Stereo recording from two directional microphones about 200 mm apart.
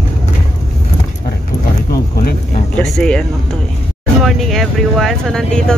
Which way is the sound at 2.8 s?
5° left (ahead or behind).